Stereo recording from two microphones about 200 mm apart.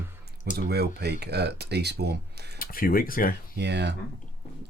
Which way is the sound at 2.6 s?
45° left (ahead or behind).